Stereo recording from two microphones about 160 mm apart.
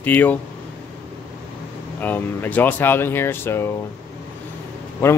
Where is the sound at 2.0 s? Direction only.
10° left (ahead or behind).